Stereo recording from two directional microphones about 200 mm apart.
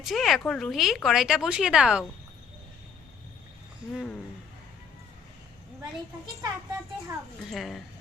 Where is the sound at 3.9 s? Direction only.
5° left (ahead or behind).